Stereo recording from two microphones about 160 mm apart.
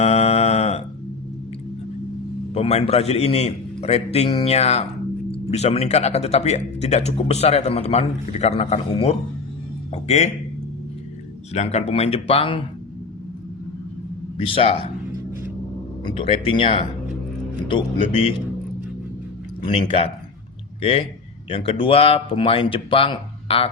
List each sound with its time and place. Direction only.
0.0 s a sound: 40° left (ahead or behind)
2.5 s speech: 40° left (ahead or behind)
11.5 s speech: 45° left (ahead or behind)
14.3 s speech: 35° left (ahead or behind)
16.0 s speech: 35° left (ahead or behind)
19.6 s speech: 35° left (ahead or behind)